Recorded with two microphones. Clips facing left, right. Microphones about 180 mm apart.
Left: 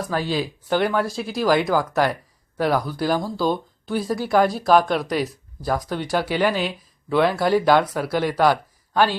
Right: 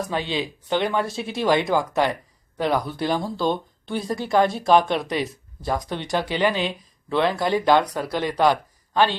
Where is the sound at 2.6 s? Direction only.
5° left (ahead or behind).